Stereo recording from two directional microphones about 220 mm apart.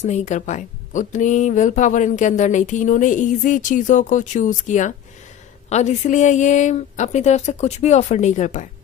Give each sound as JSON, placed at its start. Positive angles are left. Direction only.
{"t": 0.0, "sound": "speech", "side_deg": 30}